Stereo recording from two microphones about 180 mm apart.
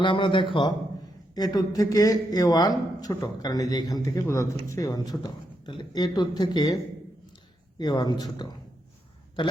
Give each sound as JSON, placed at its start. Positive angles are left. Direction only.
{"t": 0.0, "sound": "speech", "side_deg": 25}
{"t": 7.8, "sound": "speech", "side_deg": 25}